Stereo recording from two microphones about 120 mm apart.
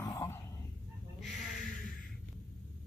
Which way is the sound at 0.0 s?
20° left (ahead or behind).